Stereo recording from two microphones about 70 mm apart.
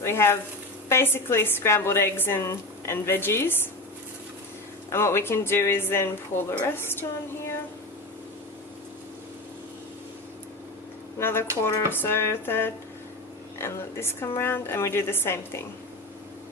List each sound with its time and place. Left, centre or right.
0.0 s a woman's voice: left
4.9 s a woman's voice: left
11.2 s a woman's voice: left